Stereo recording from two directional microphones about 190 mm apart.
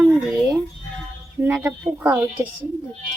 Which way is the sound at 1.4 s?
10° right (ahead or behind).